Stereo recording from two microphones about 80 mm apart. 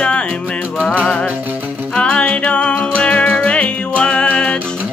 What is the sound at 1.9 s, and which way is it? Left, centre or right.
Music, centre.